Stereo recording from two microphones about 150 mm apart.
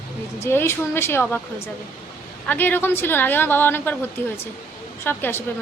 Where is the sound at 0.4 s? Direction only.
15° left (ahead or behind).